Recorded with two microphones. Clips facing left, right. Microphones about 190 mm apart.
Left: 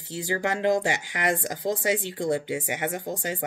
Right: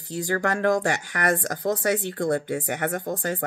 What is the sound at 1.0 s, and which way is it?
Speech, 45° right (ahead or behind).